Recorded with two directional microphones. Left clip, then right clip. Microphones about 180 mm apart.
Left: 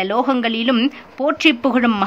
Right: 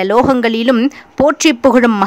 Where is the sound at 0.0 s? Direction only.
40° right (ahead or behind).